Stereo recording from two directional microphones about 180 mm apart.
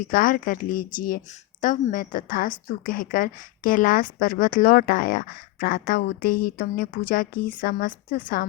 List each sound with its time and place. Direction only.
0.1 s a woman's voice: 50° left (ahead or behind)